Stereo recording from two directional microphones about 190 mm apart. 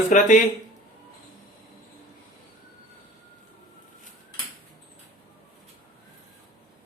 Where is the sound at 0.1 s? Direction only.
40° left (ahead or behind).